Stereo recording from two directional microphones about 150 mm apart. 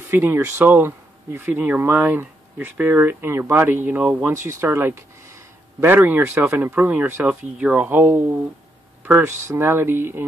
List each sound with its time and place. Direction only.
0.1 s speech: 15° right (ahead or behind)